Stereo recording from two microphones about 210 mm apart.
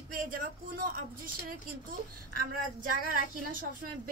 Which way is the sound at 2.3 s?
40° right (ahead or behind).